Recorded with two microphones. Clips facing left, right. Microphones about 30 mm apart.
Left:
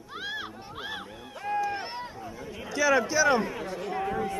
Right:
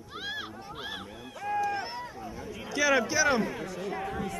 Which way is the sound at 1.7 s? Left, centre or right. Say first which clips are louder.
Even; left.